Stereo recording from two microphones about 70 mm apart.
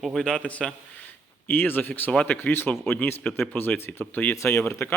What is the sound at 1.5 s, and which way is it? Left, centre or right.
Speech, left.